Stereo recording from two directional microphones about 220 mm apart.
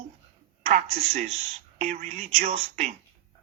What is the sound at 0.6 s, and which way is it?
Speech, 30° right (ahead or behind).